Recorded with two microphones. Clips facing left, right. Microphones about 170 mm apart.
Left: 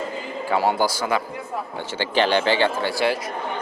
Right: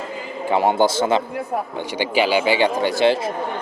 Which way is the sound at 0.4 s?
20° right (ahead or behind).